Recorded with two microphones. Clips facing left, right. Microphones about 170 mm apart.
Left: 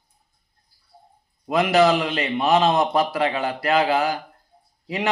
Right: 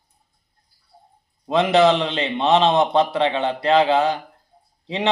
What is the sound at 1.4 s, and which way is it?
A man's voice, 25° right (ahead or behind).